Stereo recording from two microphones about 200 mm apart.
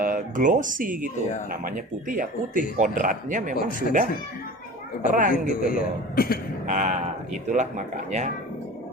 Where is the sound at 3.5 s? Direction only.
45° left (ahead or behind).